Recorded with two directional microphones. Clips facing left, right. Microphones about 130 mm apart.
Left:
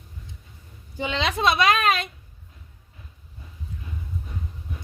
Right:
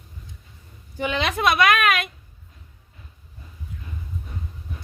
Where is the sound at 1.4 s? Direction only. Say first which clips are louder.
Right 1 dB; 25° left (ahead or behind).